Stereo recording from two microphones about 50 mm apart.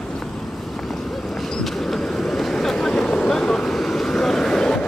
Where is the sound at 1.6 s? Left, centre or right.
Centre.